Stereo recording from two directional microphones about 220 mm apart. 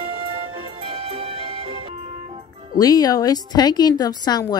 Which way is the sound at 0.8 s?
25° right (ahead or behind).